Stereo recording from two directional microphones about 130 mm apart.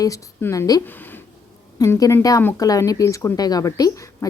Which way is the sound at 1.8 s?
25° left (ahead or behind).